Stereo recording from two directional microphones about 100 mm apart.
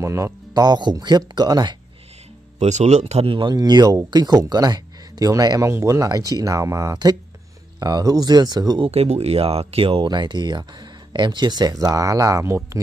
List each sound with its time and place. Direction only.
0.0 s speech: 30° right (ahead or behind)
2.6 s speech: 90° right; by 3.5 s 65° right (ahead or behind)
3.5 s speech: 45° right (ahead or behind)
8.8 s speech: 90° right; by 10.0 s 70° right (ahead or behind)
10.0 s speech: 45° right (ahead or behind); by 12.8 s 30° right (ahead or behind)